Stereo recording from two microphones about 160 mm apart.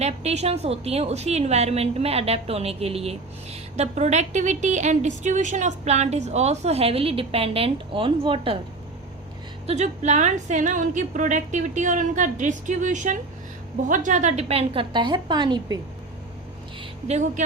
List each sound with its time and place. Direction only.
0.0 s a woman's voice: 40° right (ahead or behind)
9.6 s a woman's voice: 45° right (ahead or behind); by 15.8 s 25° right (ahead or behind)
17.1 s a woman's voice: 45° right (ahead or behind)